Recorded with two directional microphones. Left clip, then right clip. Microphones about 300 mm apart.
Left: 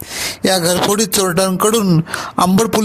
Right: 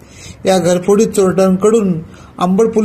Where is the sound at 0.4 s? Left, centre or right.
Left.